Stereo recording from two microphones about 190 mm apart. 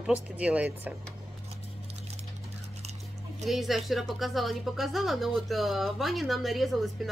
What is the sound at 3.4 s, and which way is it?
Speech, centre (ahead or behind).